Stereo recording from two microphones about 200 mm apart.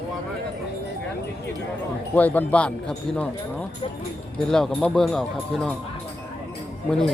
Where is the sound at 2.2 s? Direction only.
10° left (ahead or behind).